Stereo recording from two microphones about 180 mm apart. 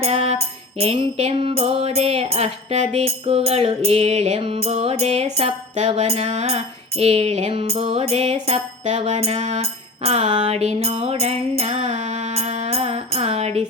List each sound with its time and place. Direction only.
0.0 s music: 35° right (ahead or behind)